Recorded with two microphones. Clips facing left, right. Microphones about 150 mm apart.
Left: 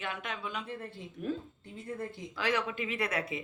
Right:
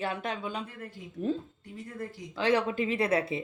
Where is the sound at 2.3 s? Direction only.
30° right (ahead or behind).